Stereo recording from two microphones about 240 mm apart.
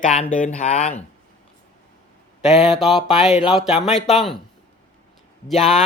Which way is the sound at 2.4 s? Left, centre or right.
Left.